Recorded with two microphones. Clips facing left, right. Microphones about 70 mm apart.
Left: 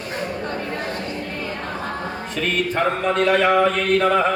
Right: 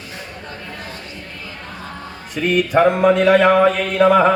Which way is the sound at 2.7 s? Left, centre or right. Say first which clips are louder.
Right 10 dB; centre.